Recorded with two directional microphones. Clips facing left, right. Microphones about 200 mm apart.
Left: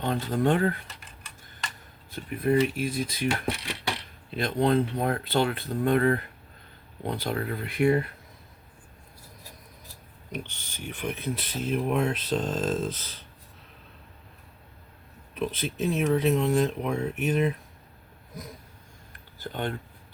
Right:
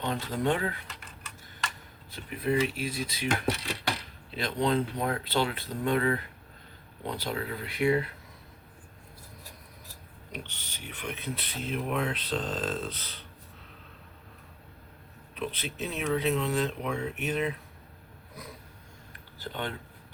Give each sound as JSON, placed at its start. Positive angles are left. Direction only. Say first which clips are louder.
{"t": 0.0, "sound": "speech", "louder": "left 4 dB", "side_deg": 50}
{"t": 2.1, "sound": "speech", "louder": "left 4 dB", "side_deg": 50}
{"t": 4.4, "sound": "speech", "louder": "left 4 dB", "side_deg": 50}
{"t": 10.3, "sound": "speech", "louder": "left 5 dB", "side_deg": 45}
{"t": 15.4, "sound": "speech", "louder": "left 5 dB", "side_deg": 45}
{"t": 19.4, "sound": "speech", "louder": "left 4 dB", "side_deg": 45}